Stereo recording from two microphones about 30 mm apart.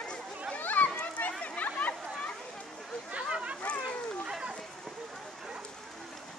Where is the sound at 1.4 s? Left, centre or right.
Left.